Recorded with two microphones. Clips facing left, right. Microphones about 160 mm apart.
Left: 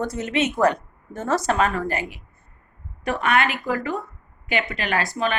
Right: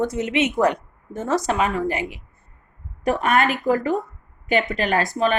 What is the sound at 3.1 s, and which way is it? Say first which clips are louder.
A woman's voice: right 2 dB; 45° right (ahead or behind).